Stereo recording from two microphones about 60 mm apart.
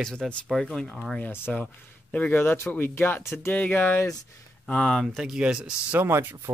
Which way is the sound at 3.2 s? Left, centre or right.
Left.